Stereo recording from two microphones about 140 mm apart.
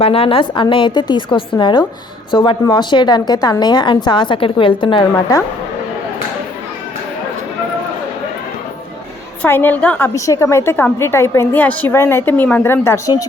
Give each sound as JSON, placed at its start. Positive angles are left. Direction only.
{"t": 0.0, "sound": "a woman's voice", "side_deg": 40}
{"t": 9.4, "sound": "a woman's voice", "side_deg": 15}
{"t": 10.2, "sound": "a woman's voice", "side_deg": 25}